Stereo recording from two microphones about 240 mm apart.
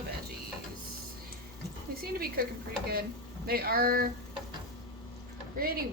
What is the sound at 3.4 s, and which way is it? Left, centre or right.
Speech, right.